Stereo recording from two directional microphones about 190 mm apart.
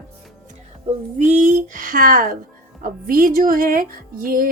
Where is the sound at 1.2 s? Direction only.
40° right (ahead or behind).